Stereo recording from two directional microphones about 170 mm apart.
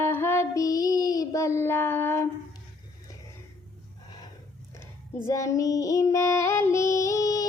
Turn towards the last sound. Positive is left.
turn(degrees=20)  # may be behind; listen again after turning